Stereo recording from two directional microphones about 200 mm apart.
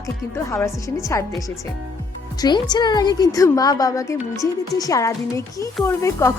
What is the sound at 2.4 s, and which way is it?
A woman's voice, 20° left (ahead or behind).